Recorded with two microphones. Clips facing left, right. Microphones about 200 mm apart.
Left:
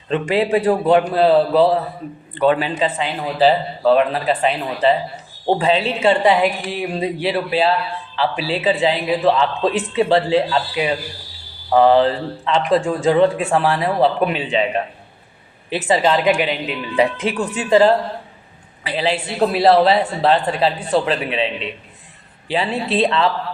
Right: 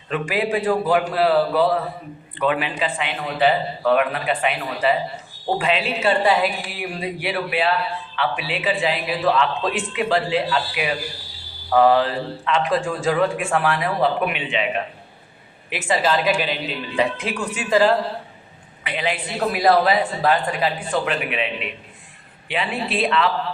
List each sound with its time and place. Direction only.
0.1 s a man's voice: 25° left (ahead or behind)